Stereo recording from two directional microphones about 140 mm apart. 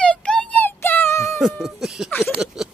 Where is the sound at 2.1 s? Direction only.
15° left (ahead or behind).